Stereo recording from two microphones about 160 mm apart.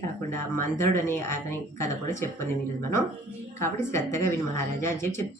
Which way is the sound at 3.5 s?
15° left (ahead or behind).